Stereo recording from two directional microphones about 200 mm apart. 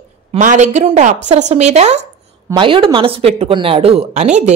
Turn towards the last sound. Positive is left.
turn(degrees=-35)  # may be behind; listen again after turning